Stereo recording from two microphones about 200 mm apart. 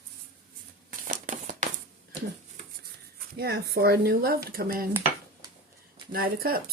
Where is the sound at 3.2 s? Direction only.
50° right (ahead or behind).